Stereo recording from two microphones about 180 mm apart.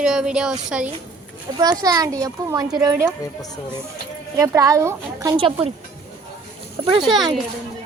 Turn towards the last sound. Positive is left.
turn(degrees=0)  # may be behind; listen again after turning